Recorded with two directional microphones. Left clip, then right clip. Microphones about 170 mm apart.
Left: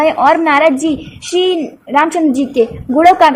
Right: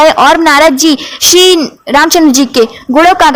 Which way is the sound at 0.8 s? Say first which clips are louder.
Right 10 dB; 15° right (ahead or behind).